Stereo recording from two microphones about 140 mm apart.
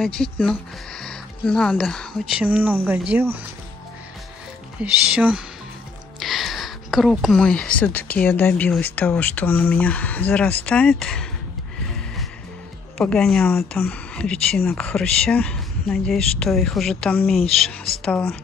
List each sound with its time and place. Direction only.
0.0 s speech: 5° left (ahead or behind); by 3.3 s 15° right (ahead or behind)
4.7 s speech: 10° right (ahead or behind)
12.9 s speech: 5° left (ahead or behind)